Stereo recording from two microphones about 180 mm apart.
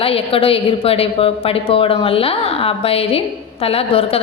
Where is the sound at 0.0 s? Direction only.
30° left (ahead or behind).